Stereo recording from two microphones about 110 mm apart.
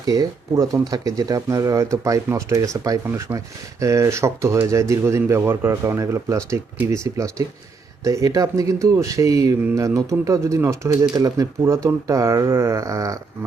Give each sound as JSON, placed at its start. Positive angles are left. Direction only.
{"t": 0.0, "sound": "speech", "side_deg": -35}
{"t": 3.1, "sound": "speech", "side_deg": -20}